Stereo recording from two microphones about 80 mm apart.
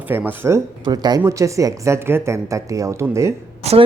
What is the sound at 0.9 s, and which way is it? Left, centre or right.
Speech, right.